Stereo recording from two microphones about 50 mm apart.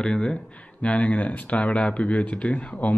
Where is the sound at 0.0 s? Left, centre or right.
Centre.